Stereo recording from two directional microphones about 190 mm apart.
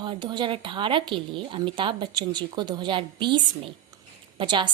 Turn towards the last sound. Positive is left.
turn(degrees=-25)  # may be behind; listen again after turning